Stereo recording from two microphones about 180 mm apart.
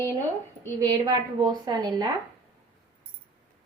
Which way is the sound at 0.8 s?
20° right (ahead or behind).